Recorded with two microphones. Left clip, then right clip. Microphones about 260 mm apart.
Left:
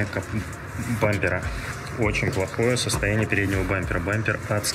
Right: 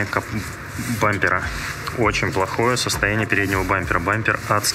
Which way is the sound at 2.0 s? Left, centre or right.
Right.